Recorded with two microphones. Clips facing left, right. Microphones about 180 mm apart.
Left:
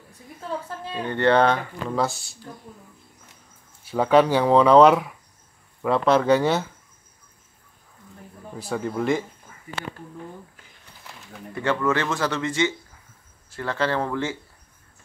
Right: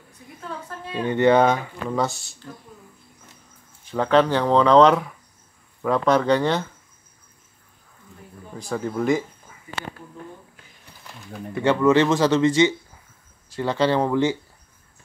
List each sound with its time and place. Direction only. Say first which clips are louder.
0.9 s speech: right 3 dB; 10° right (ahead or behind)
3.8 s speech: left 1 dB; 10° left (ahead or behind)
8.5 s speech: right 1 dB; centre (ahead or behind)
11.6 s speech: right 6 dB; 20° right (ahead or behind)